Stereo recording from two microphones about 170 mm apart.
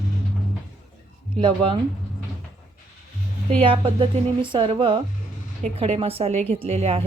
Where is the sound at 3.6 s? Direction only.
30° right (ahead or behind).